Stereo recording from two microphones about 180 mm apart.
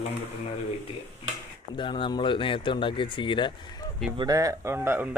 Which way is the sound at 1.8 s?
25° left (ahead or behind).